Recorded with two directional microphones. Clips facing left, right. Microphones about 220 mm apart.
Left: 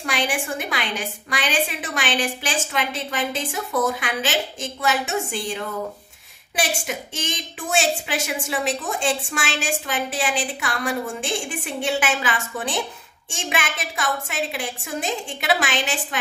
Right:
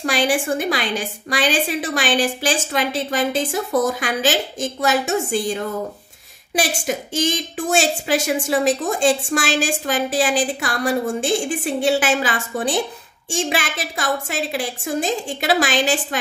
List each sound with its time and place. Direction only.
0.0 s a woman's voice: 35° right (ahead or behind)